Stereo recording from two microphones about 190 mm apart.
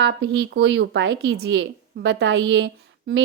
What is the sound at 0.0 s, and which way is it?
A woman's voice, 70° right (ahead or behind).